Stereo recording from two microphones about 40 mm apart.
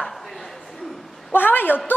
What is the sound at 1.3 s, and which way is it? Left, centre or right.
Speech, left.